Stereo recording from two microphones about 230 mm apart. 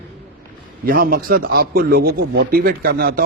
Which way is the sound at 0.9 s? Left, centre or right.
Right.